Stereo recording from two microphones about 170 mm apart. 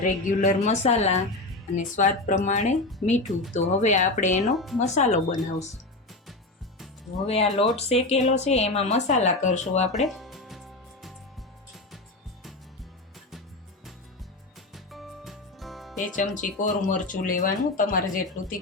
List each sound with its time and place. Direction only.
0.0 s a woman's voice: 50° left (ahead or behind)
4.5 s speech: centre (ahead or behind)
4.8 s speech: 45° left (ahead or behind)
7.3 s a woman's voice: 35° left (ahead or behind)
10.1 s music: centre (ahead or behind)
14.7 s music: centre (ahead or behind)
16.1 s speech: 50° left (ahead or behind)